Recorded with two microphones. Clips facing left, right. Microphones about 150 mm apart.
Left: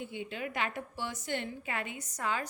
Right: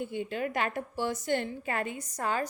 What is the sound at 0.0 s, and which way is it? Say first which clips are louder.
A woman's voice: right 6 dB; 45° right (ahead or behind).